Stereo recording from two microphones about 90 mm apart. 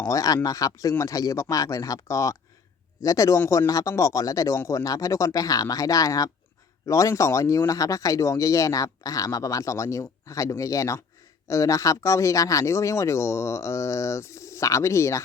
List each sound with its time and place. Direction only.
0.1 s speech: 40° left (ahead or behind)